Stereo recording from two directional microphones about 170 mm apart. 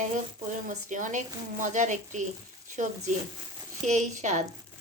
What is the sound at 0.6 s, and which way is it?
Speech, 50° right (ahead or behind).